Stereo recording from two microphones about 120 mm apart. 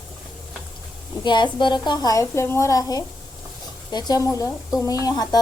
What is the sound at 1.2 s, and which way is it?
A woman's voice, 40° left (ahead or behind).